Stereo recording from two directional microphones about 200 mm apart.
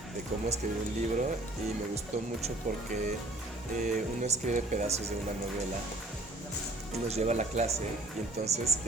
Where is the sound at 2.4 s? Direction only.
35° right (ahead or behind).